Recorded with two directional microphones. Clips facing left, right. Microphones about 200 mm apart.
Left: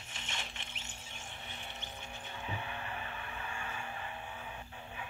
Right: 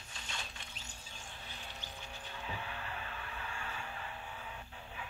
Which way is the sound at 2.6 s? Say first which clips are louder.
Left 2 dB; 15° left (ahead or behind).